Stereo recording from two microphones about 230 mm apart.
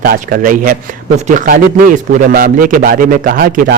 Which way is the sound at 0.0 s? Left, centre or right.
Right.